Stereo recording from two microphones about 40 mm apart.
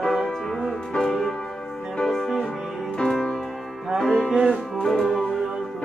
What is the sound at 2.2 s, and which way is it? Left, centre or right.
Music, centre.